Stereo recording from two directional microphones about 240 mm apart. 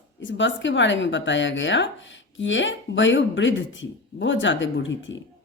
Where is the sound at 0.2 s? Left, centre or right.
Left.